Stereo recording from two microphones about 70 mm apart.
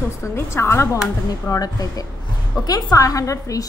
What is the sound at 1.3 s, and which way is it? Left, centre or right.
A woman's voice, left.